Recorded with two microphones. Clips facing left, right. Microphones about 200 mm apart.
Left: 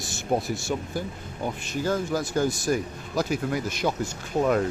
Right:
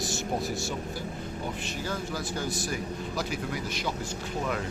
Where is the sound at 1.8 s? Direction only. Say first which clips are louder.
Left 9 dB; 45° left (ahead or behind).